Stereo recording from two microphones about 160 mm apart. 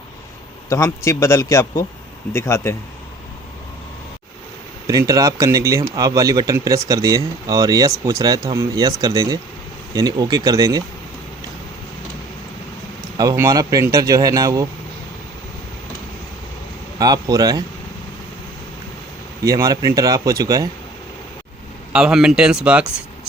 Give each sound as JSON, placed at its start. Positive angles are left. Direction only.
{"t": 0.7, "sound": "a man's voice", "side_deg": 20}
{"t": 4.9, "sound": "speech", "side_deg": -20}
{"t": 13.1, "sound": "speech", "side_deg": -20}
{"t": 17.0, "sound": "speech", "side_deg": -25}
{"t": 19.5, "sound": "speech", "side_deg": -20}
{"t": 21.9, "sound": "speech", "side_deg": -5}